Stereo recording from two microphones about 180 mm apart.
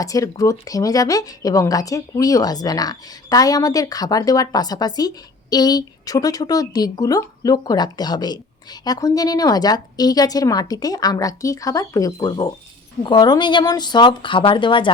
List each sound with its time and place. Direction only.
0.0 s speech: 20° left (ahead or behind)